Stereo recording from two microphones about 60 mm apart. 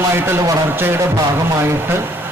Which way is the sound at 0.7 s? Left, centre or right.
Right.